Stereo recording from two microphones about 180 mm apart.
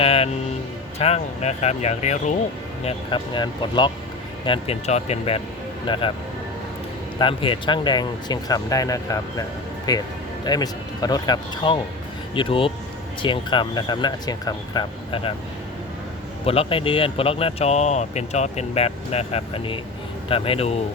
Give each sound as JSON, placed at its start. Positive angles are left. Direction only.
{"t": 0.0, "sound": "speech", "side_deg": 35}
{"t": 2.8, "sound": "speech", "side_deg": 25}
{"t": 7.2, "sound": "speech", "side_deg": 30}
{"t": 16.5, "sound": "speech", "side_deg": 30}